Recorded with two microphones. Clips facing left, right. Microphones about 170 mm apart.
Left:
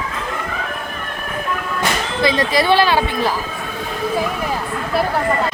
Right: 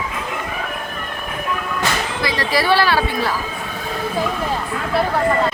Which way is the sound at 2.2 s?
20° left (ahead or behind).